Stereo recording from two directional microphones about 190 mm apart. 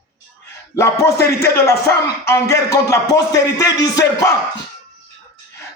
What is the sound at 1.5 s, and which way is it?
Speech, 15° left (ahead or behind).